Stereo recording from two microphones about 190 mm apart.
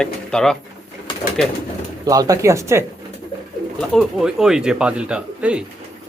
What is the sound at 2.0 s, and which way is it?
Speech, 20° right (ahead or behind).